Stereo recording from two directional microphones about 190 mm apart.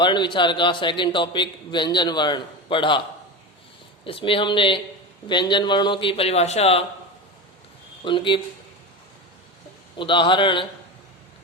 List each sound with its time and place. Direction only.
0.0 s a man's voice: 25° left (ahead or behind)
4.0 s a man's voice: 30° left (ahead or behind)
8.0 s a man's voice: 25° left (ahead or behind)
10.0 s a man's voice: 25° left (ahead or behind)